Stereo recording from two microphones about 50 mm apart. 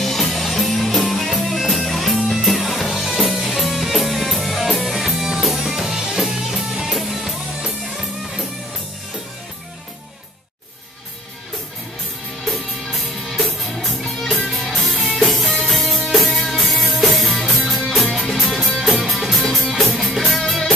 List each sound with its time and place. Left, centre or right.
0.0 s music: centre
13.3 s music: centre